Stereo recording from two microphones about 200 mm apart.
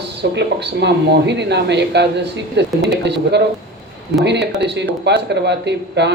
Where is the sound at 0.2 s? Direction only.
60° right (ahead or behind).